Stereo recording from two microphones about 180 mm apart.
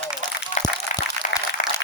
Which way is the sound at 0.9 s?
45° left (ahead or behind).